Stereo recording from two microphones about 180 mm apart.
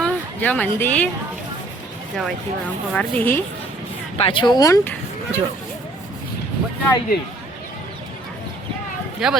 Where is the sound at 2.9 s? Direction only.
10° left (ahead or behind).